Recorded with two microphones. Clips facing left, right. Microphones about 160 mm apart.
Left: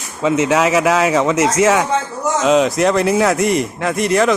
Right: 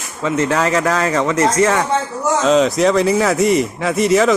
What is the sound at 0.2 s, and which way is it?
Speech, 10° left (ahead or behind).